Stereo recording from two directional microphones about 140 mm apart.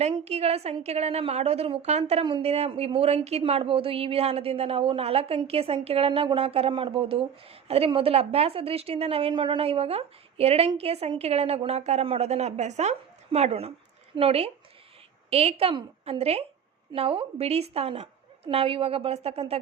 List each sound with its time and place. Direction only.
0.0 s a woman's voice: 50° right (ahead or behind)